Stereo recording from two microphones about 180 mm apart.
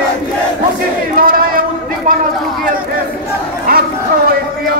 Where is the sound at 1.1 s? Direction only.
50° right (ahead or behind).